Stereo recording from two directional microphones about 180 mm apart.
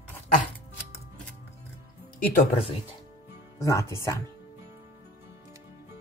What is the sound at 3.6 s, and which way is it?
Speech, 15° left (ahead or behind).